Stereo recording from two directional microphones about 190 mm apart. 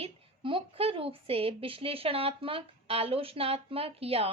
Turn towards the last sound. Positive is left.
turn(degrees=-30)  # may be behind; listen again after turning